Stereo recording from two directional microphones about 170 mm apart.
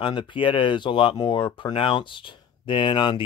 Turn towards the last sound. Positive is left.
turn(degrees=30)  # may be behind; listen again after turning